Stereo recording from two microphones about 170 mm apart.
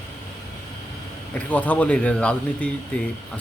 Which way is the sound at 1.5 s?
10° left (ahead or behind).